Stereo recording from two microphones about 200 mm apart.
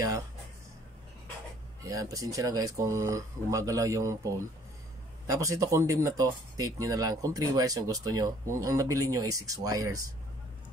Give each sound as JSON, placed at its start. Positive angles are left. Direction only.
{"t": 1.8, "sound": "speech", "side_deg": -15}